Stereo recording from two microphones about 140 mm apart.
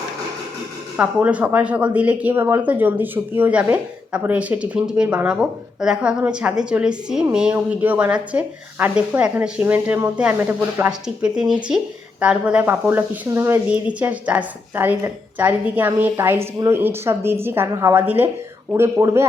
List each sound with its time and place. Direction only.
0.9 s speech: 10° right (ahead or behind)
11.0 s speech: 5° right (ahead or behind)